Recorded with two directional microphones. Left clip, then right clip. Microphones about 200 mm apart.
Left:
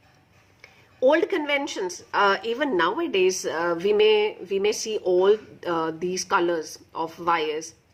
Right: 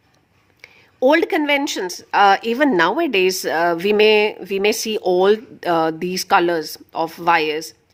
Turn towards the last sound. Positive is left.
turn(degrees=-50)  # may be behind; listen again after turning